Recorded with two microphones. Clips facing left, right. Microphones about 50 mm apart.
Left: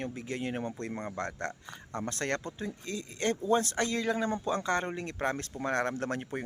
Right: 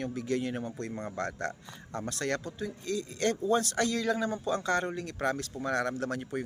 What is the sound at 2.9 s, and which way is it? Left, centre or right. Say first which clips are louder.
Speech: right 2 dB; left.